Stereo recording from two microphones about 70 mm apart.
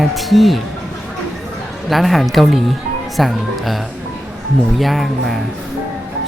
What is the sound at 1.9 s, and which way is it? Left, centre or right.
Speech, centre.